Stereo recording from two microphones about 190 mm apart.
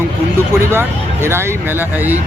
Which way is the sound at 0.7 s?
10° right (ahead or behind).